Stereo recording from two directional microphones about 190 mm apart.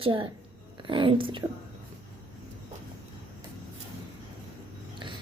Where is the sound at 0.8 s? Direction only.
25° right (ahead or behind).